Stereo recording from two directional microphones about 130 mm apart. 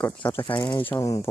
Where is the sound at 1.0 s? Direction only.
25° left (ahead or behind).